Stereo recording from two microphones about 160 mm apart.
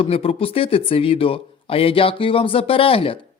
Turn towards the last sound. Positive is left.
turn(degrees=35)  # may be behind; listen again after turning